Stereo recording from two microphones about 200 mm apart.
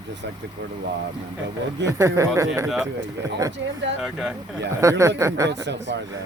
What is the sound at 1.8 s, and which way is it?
Speech, 15° right (ahead or behind).